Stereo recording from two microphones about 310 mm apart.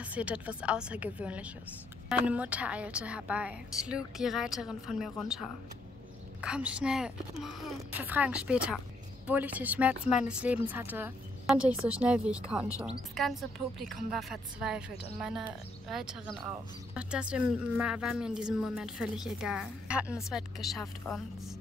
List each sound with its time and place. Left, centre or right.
0.0 s a woman's voice: centre
15.1 s a woman's voice: centre